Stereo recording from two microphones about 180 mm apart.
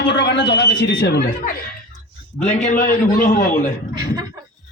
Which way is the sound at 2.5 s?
45° left (ahead or behind).